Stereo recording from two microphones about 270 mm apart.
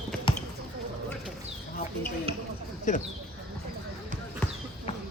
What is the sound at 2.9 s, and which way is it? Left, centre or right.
Speech, left.